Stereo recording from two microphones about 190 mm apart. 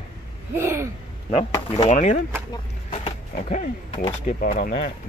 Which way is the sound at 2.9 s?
40° left (ahead or behind).